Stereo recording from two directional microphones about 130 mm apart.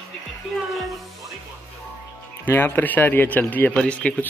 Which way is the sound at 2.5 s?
15° left (ahead or behind).